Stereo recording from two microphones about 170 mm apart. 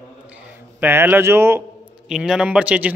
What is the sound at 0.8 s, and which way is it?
Speech, 15° right (ahead or behind).